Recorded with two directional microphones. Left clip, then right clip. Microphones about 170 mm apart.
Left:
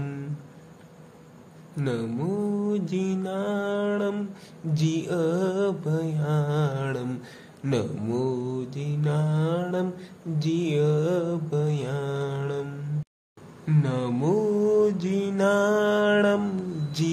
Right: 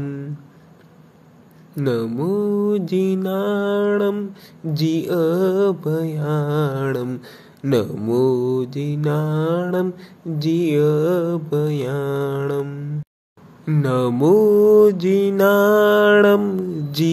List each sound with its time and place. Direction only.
1.8 s mantra: 35° right (ahead or behind)
13.8 s mantra: 45° right (ahead or behind)
16.3 s speech: 30° right (ahead or behind)